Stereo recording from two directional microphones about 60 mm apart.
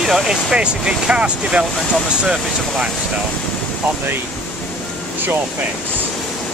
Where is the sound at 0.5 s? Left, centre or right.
Centre.